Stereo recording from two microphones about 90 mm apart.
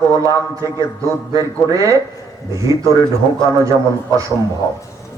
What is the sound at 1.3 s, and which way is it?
Mantra, 40° right (ahead or behind).